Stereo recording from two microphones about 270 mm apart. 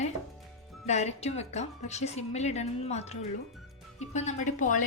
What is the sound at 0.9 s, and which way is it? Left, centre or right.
A woman's voice, left.